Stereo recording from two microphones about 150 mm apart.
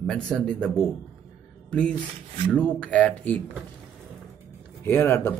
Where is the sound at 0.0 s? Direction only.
5° left (ahead or behind).